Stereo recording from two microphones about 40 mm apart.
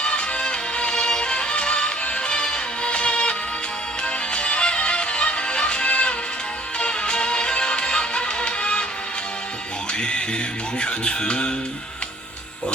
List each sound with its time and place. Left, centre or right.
0.0 s music: left
10.0 s speech: left